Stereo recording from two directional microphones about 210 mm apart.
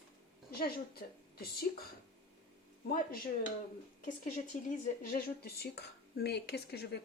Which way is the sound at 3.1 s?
40° left (ahead or behind).